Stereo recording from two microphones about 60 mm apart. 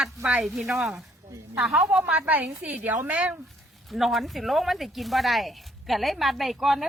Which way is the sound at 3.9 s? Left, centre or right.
Centre.